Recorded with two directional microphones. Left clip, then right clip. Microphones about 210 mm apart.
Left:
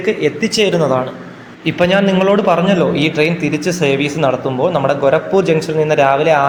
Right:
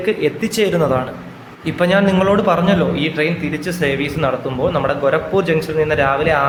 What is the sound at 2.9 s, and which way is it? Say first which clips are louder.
A woman's voice: left 4 dB; 15° left (ahead or behind).